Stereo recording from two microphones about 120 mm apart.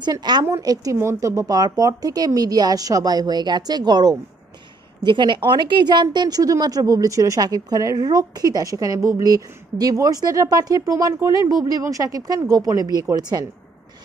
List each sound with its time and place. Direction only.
0.0 s speech: 35° right (ahead or behind)